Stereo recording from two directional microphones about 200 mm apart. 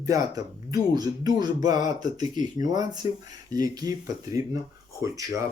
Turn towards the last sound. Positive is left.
turn(degrees=-15)  # may be behind; listen again after turning